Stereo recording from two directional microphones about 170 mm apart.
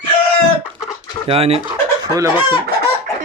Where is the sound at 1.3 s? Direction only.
35° right (ahead or behind).